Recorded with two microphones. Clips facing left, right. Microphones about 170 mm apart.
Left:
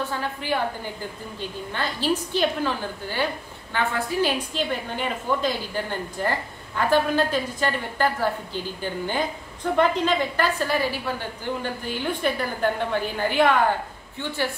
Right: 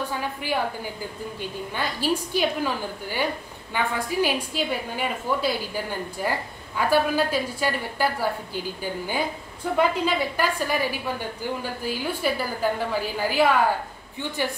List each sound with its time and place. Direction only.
0.2 s a woman's voice: 10° right (ahead or behind)
1.7 s a woman's voice: 10° right (ahead or behind)
14.2 s a woman's voice: 15° right (ahead or behind)